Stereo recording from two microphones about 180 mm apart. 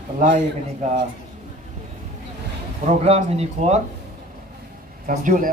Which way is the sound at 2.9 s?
35° right (ahead or behind).